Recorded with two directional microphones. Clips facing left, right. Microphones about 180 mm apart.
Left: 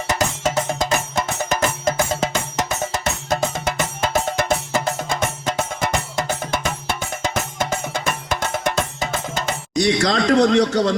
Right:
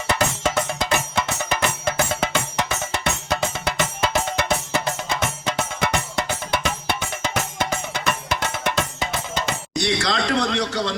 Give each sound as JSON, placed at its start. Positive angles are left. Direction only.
{"t": 0.4, "sound": "music", "side_deg": 40}
{"t": 9.8, "sound": "speech", "side_deg": 40}